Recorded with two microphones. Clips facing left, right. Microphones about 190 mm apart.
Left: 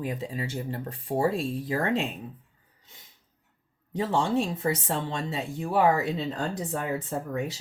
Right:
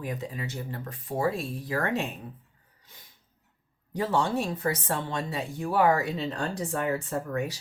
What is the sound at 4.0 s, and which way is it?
Speech, 25° left (ahead or behind).